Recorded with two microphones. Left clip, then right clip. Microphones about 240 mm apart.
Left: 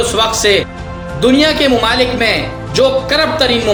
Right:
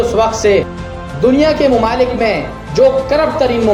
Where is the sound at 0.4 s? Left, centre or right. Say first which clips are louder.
Even; centre.